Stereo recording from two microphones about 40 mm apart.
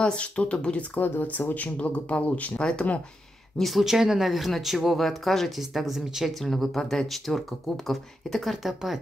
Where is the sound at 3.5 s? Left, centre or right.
Centre.